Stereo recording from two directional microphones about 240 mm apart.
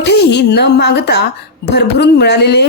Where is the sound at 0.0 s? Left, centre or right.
Left.